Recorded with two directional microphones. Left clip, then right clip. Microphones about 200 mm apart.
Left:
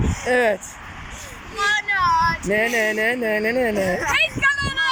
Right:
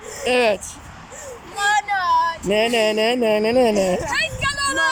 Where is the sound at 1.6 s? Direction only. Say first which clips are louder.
Right 1 dB; 65° right (ahead or behind).